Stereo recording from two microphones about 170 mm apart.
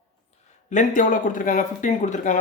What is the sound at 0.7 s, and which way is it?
Speech, 50° left (ahead or behind).